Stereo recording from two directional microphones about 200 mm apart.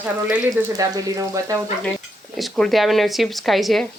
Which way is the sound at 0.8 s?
15° right (ahead or behind).